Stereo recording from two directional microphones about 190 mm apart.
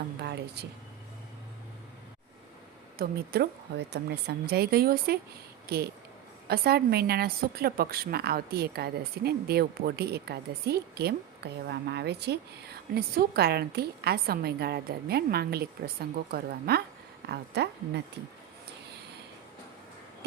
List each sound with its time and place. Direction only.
0.2 s a woman's voice: 60° right (ahead or behind)
3.0 s a woman's voice: 55° right (ahead or behind)